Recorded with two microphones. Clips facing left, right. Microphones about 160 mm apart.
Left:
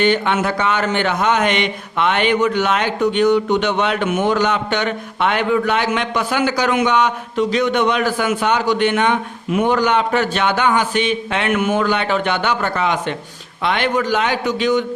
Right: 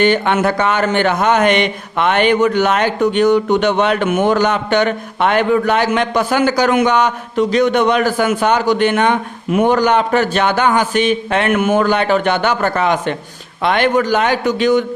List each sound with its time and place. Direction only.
0.0 s speech: 50° right (ahead or behind)